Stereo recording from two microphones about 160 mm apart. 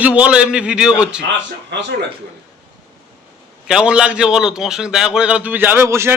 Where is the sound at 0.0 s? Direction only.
10° right (ahead or behind).